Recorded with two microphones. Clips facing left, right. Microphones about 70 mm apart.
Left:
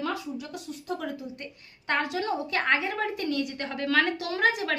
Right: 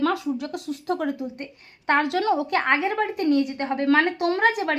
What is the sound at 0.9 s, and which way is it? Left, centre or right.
Speech, right.